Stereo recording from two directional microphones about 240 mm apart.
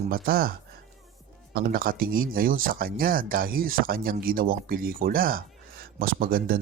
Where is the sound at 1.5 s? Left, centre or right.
Right.